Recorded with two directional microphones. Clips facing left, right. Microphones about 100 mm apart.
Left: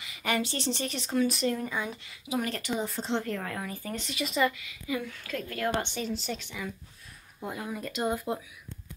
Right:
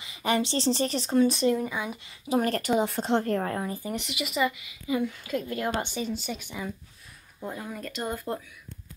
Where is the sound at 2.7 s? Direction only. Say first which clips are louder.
Right 6 dB; 65° right (ahead or behind).